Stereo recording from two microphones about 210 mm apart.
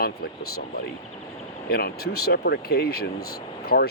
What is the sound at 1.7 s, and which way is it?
Speech, 50° left (ahead or behind).